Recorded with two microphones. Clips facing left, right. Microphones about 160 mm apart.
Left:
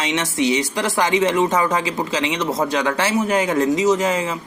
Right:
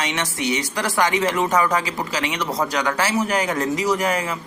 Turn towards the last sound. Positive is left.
turn(degrees=20)  # may be behind; listen again after turning